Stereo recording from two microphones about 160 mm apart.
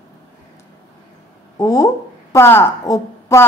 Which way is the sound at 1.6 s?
20° left (ahead or behind).